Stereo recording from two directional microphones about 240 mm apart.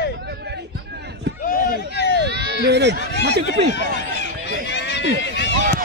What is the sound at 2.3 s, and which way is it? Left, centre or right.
Speech, right.